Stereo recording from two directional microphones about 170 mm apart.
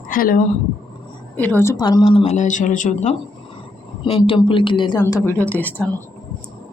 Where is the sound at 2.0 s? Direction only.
35° left (ahead or behind).